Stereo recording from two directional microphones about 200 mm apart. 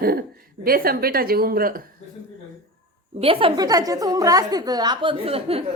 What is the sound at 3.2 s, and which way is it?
Speech, 25° right (ahead or behind).